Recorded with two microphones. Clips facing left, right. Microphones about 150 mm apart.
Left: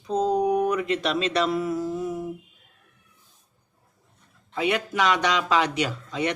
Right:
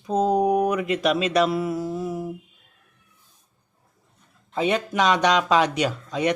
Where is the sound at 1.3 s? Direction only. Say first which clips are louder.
Right 3 dB; 5° right (ahead or behind).